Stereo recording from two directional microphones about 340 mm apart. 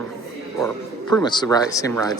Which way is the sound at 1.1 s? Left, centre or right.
Centre.